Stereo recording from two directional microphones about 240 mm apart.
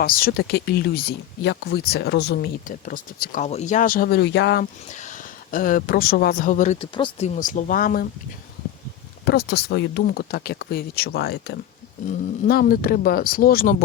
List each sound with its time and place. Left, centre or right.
0.0 s speech: left
5.0 s speech: left
9.2 s speech: left